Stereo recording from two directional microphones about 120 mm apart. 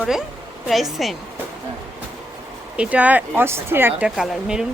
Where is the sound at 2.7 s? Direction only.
10° right (ahead or behind).